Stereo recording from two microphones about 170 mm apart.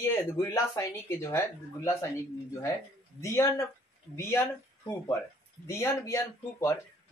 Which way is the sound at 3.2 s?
15° left (ahead or behind).